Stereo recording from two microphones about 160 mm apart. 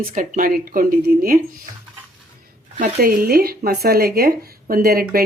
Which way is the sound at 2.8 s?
65° right (ahead or behind).